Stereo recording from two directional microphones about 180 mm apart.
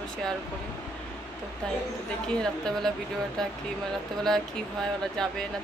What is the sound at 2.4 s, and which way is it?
Speech, centre (ahead or behind).